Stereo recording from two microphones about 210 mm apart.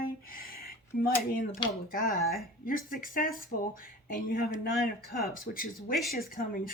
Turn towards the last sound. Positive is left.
turn(degrees=40)  # may be behind; listen again after turning